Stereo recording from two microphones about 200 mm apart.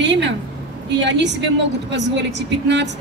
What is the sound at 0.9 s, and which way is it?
A woman's voice, 60° right (ahead or behind).